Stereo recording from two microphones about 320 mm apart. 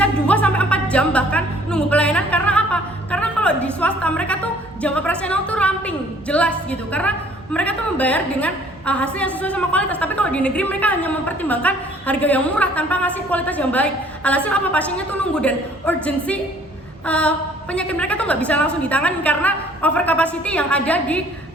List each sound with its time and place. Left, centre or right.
0.0 s music: centre
3.8 s a woman's voice: centre